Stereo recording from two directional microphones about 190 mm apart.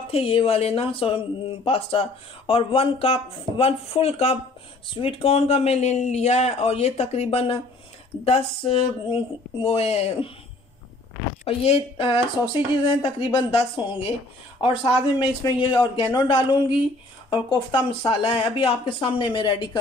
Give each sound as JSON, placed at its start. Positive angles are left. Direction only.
{"t": 0.1, "sound": "speech", "side_deg": 30}
{"t": 11.4, "sound": "speech", "side_deg": 30}